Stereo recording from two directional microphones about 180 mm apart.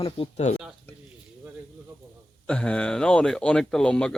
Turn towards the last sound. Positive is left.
turn(degrees=5)  # may be behind; listen again after turning